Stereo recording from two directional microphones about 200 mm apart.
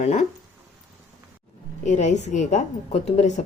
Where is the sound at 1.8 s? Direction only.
35° left (ahead or behind).